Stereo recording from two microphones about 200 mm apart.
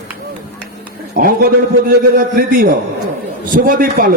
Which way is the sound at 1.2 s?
45° right (ahead or behind).